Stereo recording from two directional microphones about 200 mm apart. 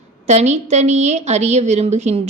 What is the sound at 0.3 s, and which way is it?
A woman's voice, 35° right (ahead or behind).